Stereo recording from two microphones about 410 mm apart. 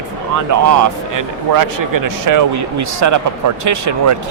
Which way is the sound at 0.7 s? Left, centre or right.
Right.